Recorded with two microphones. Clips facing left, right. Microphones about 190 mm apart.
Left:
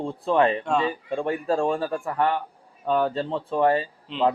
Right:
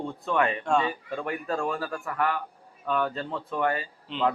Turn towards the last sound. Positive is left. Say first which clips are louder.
# left 4 dB
turn(degrees=0)  # may be behind; listen again after turning